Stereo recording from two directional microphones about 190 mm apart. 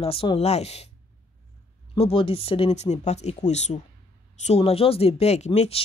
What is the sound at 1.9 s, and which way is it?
Speech, 25° left (ahead or behind).